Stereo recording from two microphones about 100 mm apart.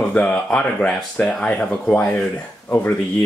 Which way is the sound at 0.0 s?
10° left (ahead or behind).